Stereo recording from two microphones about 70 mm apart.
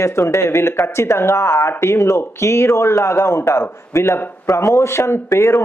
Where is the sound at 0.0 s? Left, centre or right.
Left.